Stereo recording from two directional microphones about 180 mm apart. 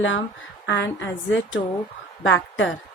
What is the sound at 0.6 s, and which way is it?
A woman's voice, 75° left (ahead or behind).